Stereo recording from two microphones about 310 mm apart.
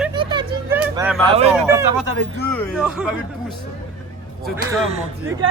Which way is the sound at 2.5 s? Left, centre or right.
Centre.